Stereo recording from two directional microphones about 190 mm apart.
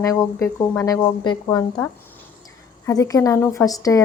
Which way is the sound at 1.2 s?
20° left (ahead or behind).